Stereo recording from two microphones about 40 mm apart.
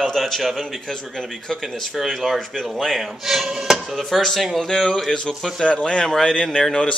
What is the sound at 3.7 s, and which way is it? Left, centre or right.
Speech, centre.